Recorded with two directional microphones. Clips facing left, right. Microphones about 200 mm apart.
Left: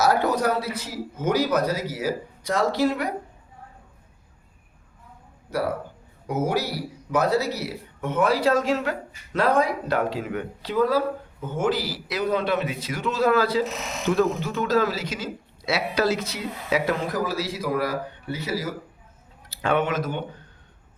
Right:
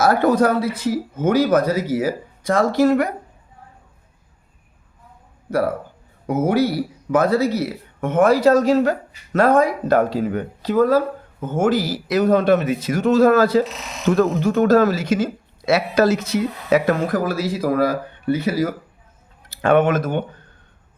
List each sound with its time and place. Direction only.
0.0 s speech: 50° right (ahead or behind)
5.5 s speech: 50° right (ahead or behind)